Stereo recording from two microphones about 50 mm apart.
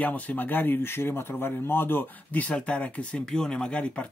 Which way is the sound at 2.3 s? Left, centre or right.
Left.